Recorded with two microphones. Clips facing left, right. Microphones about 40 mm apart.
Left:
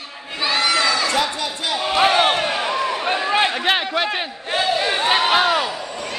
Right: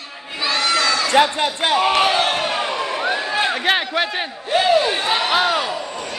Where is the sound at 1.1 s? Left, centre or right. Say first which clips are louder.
Right 5 dB; right.